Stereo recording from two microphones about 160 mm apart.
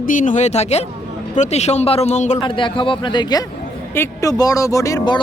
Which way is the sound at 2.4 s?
30° left (ahead or behind).